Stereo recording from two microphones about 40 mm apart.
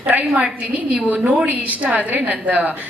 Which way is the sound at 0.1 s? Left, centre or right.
Right.